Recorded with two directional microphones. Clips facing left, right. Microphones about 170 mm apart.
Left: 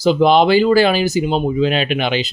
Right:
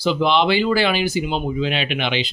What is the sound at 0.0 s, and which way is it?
Speech, 45° left (ahead or behind).